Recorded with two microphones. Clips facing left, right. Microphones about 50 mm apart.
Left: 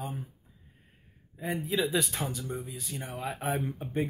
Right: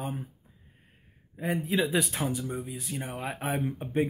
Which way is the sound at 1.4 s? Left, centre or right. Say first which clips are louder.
Right 2 dB; centre.